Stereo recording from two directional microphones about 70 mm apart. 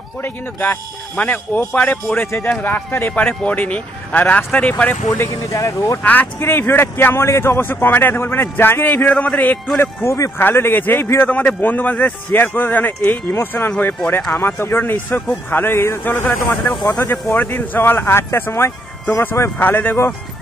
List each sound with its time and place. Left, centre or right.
0.2 s speech: left
5.3 s speech: left
6.0 s a man's voice: left
10.0 s speech: left
10.3 s a man's voice: left
16.0 s speech: left
16.3 s a man's voice: left